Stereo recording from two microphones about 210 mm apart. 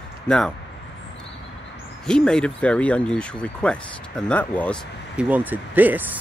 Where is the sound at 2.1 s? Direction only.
5° left (ahead or behind).